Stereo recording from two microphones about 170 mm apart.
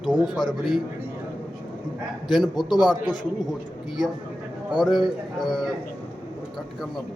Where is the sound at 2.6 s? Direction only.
25° left (ahead or behind).